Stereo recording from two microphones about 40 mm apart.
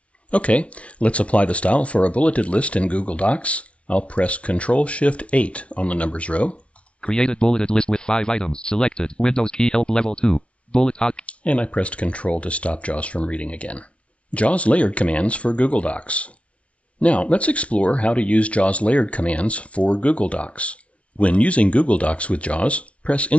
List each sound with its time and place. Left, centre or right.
0.3 s speech: left
11.2 s speech: left